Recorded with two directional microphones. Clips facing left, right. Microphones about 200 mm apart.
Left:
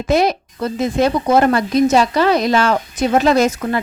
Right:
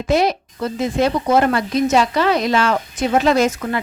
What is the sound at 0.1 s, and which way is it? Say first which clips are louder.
A woman's voice: left 1 dB; 45° left (ahead or behind).